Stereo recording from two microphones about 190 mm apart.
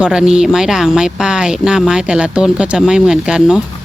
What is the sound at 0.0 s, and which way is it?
Speech, 5° right (ahead or behind).